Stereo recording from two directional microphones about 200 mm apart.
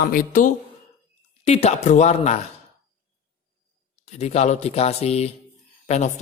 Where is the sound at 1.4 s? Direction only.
30° left (ahead or behind).